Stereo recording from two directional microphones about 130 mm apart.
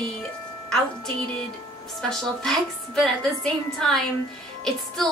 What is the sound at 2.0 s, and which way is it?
A woman's voice, 5° left (ahead or behind).